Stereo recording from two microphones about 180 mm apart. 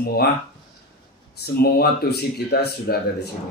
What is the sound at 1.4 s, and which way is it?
Speech, 60° left (ahead or behind).